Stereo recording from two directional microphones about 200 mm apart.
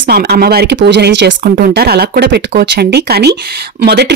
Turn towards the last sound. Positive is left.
turn(degrees=-55)  # may be behind; listen again after turning